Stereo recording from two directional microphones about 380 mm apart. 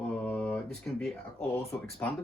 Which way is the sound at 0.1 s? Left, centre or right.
Centre.